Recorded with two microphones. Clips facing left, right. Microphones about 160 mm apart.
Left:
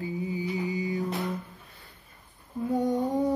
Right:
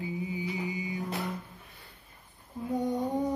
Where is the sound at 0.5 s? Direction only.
40° left (ahead or behind).